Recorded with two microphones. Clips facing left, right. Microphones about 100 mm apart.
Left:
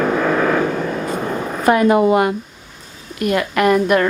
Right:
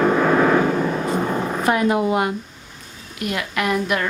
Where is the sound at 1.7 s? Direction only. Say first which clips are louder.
Left 7 dB; 65° left (ahead or behind).